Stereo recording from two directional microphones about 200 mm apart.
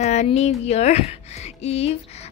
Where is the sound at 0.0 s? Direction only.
35° left (ahead or behind).